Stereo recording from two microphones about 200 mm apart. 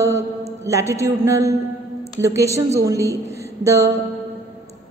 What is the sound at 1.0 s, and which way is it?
A woman's voice, 15° right (ahead or behind).